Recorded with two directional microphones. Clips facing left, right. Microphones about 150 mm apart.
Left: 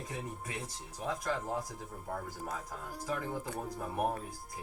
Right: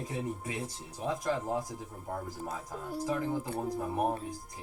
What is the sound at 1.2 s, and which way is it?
Speech, 30° right (ahead or behind).